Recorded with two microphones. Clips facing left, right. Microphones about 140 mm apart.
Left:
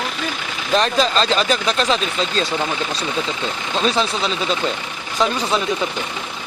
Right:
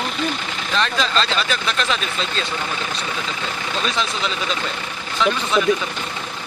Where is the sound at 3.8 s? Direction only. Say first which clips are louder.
Left 6 dB; 35° left (ahead or behind).